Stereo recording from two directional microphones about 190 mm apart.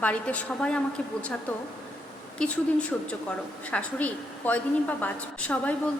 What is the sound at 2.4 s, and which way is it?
A woman's voice, 5° left (ahead or behind).